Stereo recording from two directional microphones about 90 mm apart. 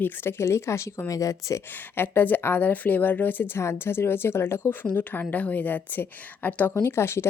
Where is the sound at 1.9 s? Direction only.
20° left (ahead or behind).